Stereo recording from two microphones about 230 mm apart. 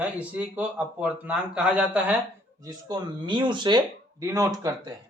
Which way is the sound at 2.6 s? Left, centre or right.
Centre.